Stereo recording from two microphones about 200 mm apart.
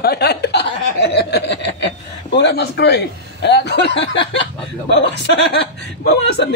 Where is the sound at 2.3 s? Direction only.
55° left (ahead or behind).